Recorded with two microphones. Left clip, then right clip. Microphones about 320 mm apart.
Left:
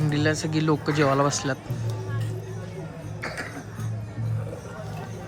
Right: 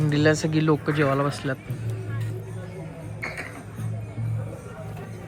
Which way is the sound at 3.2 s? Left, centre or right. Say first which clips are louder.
Even; left.